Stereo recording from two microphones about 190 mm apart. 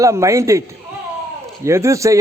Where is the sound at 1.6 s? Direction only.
15° right (ahead or behind).